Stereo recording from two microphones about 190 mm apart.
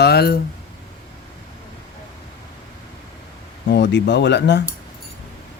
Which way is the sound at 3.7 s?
65° left (ahead or behind).